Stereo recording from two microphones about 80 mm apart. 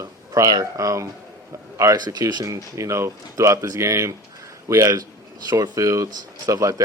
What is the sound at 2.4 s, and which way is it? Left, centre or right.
Speech, right.